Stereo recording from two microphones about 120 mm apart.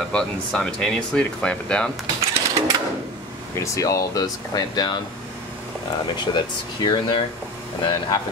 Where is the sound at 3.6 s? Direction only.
30° left (ahead or behind).